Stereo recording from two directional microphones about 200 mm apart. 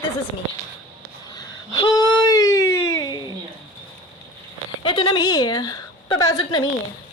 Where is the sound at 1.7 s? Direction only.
20° left (ahead or behind).